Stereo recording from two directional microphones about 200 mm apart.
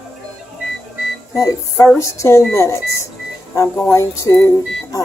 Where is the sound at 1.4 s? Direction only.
15° left (ahead or behind).